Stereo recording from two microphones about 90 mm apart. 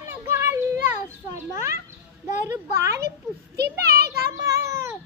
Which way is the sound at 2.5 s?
35° right (ahead or behind).